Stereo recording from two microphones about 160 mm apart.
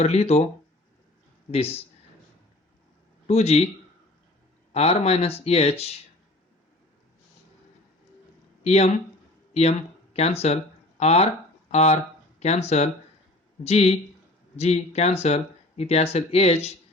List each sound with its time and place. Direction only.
0.0 s speech: 40° left (ahead or behind)
1.5 s speech: 40° left (ahead or behind)
3.2 s speech: 40° left (ahead or behind)
4.7 s speech: 40° left (ahead or behind)
8.6 s speech: 45° left (ahead or behind)